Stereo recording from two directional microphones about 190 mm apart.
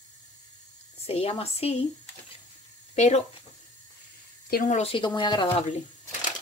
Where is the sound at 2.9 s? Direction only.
35° left (ahead or behind).